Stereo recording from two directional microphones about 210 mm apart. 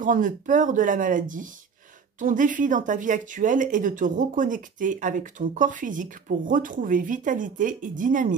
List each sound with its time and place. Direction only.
0.0 s speech: 40° right (ahead or behind)